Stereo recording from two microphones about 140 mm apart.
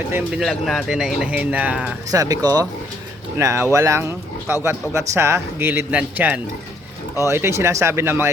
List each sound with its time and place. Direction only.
0.1 s a man's voice: 10° right (ahead or behind)
0.4 s speech: centre (ahead or behind)
2.0 s a man's voice: 25° right (ahead or behind)